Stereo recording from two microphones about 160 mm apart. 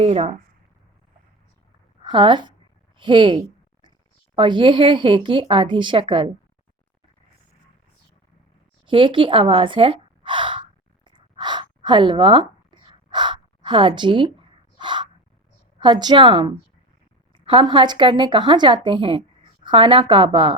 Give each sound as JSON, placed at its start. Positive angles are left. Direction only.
{"t": 0.0, "sound": "speech", "side_deg": -40}
{"t": 2.0, "sound": "a woman's voice", "side_deg": -30}
{"t": 3.0, "sound": "a sound", "side_deg": -30}
{"t": 4.4, "sound": "speech", "side_deg": -30}
{"t": 8.9, "sound": "gasp", "side_deg": -30}
{"t": 15.8, "sound": "speech", "side_deg": -30}